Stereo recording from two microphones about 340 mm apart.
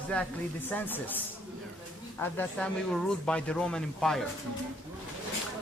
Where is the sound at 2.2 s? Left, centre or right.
Centre.